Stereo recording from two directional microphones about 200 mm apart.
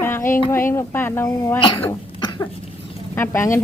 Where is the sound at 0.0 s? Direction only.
10° left (ahead or behind).